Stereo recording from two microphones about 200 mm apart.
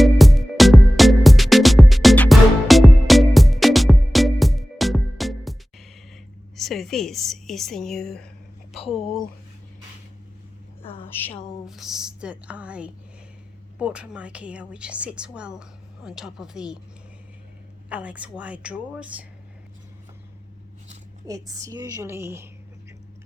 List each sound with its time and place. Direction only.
0.0 s music: centre (ahead or behind)
6.6 s speech: centre (ahead or behind)
11.0 s a woman's voice: 10° left (ahead or behind)
17.8 s a woman's voice: 5° right (ahead or behind)
21.2 s a woman's voice: 15° right (ahead or behind)